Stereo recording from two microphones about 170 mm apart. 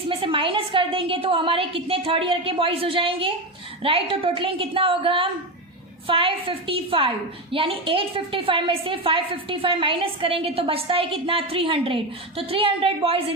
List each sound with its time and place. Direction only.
0.1 s a woman's voice: 30° right (ahead or behind)